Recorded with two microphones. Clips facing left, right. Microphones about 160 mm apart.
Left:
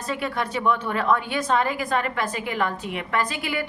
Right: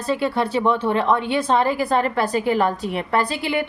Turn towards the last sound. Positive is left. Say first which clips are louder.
# right 5 dB
turn(degrees=-30)  # may be behind; listen again after turning